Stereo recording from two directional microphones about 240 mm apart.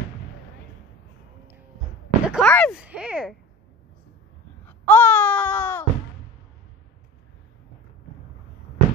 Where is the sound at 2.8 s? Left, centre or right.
Centre.